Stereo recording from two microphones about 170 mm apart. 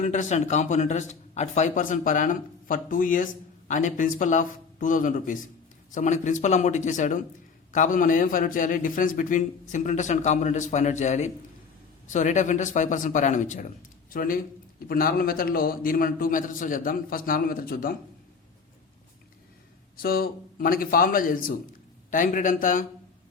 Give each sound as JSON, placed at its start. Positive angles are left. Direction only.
{"t": 0.0, "sound": "a man's voice", "side_deg": 45}
{"t": 20.0, "sound": "a man's voice", "side_deg": 60}